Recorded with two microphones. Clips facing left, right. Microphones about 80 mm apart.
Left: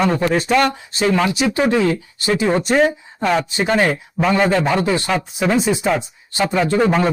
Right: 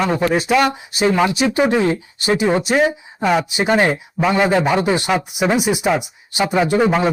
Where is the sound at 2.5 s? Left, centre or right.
Centre.